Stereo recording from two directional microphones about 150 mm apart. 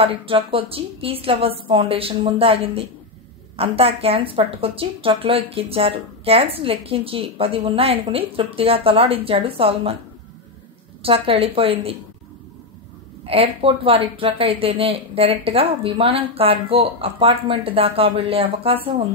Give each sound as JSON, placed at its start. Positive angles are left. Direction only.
{"t": 0.0, "sound": "speech", "side_deg": -35}
{"t": 11.0, "sound": "speech", "side_deg": -40}
{"t": 13.2, "sound": "speech", "side_deg": -40}